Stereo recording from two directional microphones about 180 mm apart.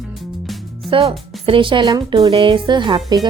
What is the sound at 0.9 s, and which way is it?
A woman's voice, 30° right (ahead or behind).